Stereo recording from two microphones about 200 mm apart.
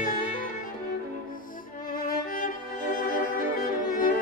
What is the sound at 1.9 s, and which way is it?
Music, 45° left (ahead or behind).